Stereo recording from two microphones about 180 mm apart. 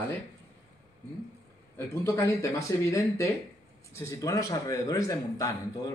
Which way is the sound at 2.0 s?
15° left (ahead or behind).